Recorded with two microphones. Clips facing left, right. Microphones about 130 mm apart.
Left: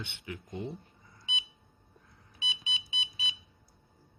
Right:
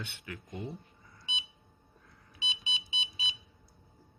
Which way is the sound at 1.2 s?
25° right (ahead or behind).